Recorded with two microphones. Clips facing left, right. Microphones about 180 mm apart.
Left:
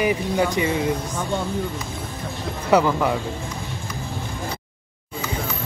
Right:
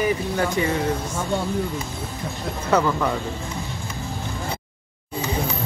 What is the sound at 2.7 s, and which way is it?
Speech, 15° left (ahead or behind).